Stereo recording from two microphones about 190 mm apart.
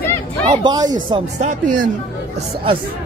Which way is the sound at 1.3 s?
45° right (ahead or behind).